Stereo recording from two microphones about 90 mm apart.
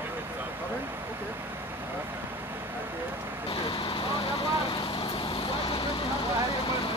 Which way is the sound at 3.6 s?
65° left (ahead or behind).